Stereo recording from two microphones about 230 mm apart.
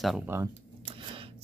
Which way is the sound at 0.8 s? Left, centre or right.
Right.